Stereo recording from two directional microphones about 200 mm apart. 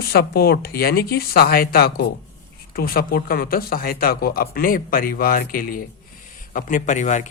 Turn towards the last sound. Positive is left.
turn(degrees=40)  # may be behind; listen again after turning